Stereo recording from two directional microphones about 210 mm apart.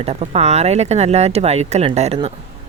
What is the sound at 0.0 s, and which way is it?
Speech, 30° right (ahead or behind).